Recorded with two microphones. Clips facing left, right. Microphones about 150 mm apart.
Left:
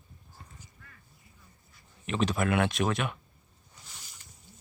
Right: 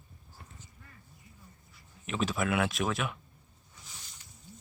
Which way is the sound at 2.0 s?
Centre (ahead or behind).